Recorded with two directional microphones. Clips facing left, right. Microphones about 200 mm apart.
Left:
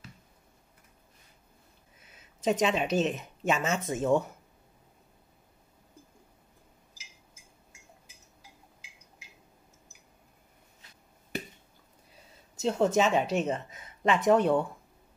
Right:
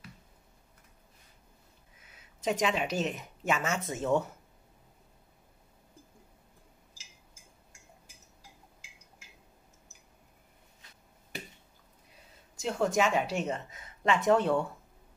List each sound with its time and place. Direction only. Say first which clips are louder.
2.4 s speech: left 3 dB; 25° left (ahead or behind)
12.5 s speech: left 3 dB; 25° left (ahead or behind)